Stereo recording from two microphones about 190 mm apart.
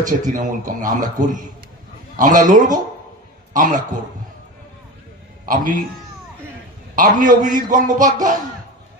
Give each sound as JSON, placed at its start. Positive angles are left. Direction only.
{"t": 0.0, "sound": "a man's voice", "side_deg": -40}
{"t": 2.1, "sound": "a man's voice", "side_deg": -45}
{"t": 5.4, "sound": "a man's voice", "side_deg": -45}
{"t": 7.0, "sound": "a man's voice", "side_deg": -45}